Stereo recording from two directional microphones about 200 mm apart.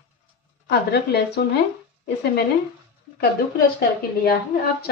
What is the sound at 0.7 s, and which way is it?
Speech, 55° left (ahead or behind).